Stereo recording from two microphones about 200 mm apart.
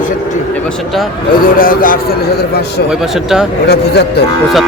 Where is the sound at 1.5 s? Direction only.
45° left (ahead or behind).